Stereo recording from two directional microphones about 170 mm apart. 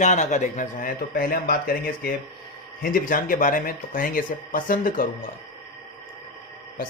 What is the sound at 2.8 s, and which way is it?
Speech, 55° left (ahead or behind).